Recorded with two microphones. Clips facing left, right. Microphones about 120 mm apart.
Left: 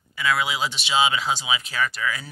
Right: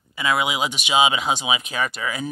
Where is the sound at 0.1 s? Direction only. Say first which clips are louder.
Right 2 dB; 20° right (ahead or behind).